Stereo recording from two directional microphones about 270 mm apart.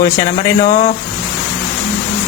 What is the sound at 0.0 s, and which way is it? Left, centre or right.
Speech, centre.